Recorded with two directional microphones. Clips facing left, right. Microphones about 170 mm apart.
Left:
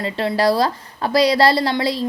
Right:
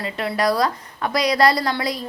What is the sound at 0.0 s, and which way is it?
A woman's voice, 30° left (ahead or behind).